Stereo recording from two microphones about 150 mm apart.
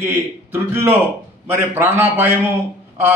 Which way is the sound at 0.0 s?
15° right (ahead or behind).